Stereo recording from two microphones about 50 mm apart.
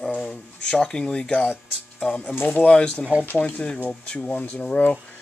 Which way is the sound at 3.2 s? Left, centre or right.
Left.